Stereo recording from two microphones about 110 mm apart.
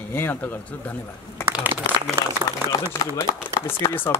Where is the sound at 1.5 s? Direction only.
20° right (ahead or behind).